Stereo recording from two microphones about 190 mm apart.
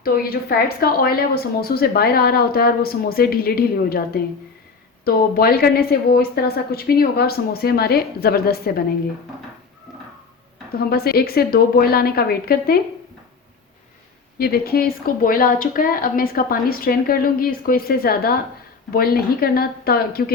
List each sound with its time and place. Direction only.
0.0 s a woman's voice: 50° left (ahead or behind)
10.7 s a woman's voice: 55° left (ahead or behind)
14.3 s a woman's voice: 55° left (ahead or behind)